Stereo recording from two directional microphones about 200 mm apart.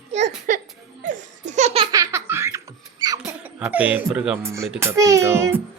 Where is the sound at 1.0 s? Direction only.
40° right (ahead or behind).